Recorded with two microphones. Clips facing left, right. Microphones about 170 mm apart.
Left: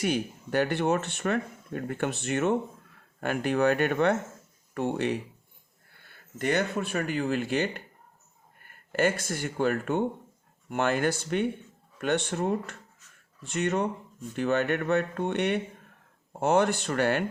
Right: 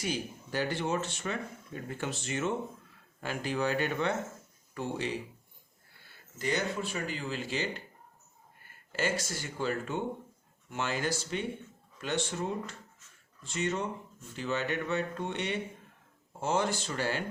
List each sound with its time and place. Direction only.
0.0 s speech: 60° left (ahead or behind)
8.9 s speech: 55° left (ahead or behind)